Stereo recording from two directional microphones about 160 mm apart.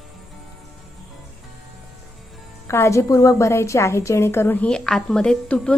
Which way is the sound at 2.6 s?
15° left (ahead or behind).